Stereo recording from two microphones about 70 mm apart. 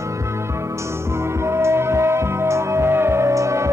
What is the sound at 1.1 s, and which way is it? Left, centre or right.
Music, right.